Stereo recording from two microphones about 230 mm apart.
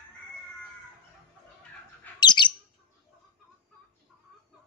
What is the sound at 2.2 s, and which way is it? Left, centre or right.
Bird, centre.